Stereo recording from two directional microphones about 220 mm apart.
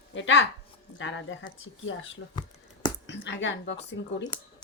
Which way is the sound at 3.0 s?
50° left (ahead or behind).